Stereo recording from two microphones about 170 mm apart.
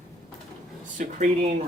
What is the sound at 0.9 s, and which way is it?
Speech, 45° right (ahead or behind).